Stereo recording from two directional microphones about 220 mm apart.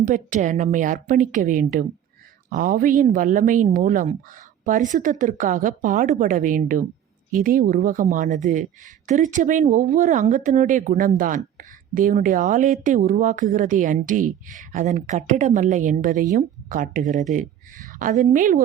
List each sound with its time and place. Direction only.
0.0 s a woman's voice: 35° right (ahead or behind)